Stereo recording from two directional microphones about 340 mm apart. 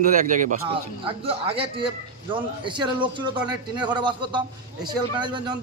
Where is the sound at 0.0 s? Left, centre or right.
Right.